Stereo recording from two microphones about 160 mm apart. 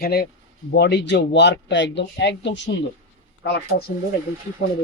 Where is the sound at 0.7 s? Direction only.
90° left.